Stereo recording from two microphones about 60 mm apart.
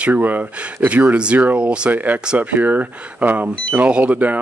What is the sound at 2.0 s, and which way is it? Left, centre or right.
Speech, right.